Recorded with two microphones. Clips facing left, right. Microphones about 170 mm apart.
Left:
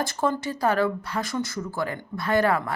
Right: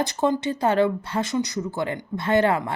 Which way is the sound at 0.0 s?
20° right (ahead or behind).